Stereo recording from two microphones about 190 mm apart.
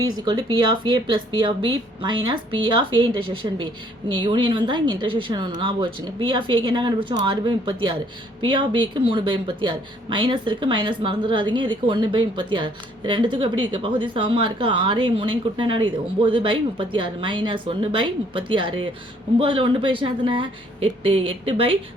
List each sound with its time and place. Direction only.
0.2 s speech: 20° right (ahead or behind)